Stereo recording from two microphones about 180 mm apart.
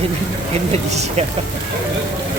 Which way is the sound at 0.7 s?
35° right (ahead or behind).